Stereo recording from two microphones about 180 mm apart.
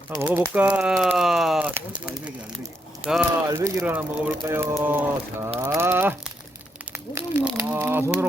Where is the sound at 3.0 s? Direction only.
5° right (ahead or behind).